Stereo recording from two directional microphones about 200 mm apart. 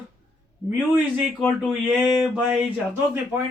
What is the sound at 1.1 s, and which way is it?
A man's voice, centre (ahead or behind).